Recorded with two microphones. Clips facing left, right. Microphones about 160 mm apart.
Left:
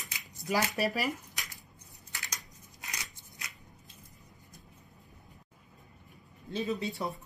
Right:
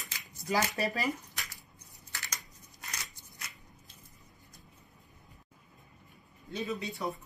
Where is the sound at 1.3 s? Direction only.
15° left (ahead or behind).